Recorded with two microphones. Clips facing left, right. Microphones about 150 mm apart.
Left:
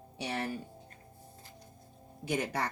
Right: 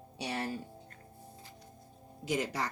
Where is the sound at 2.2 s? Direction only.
60° left (ahead or behind).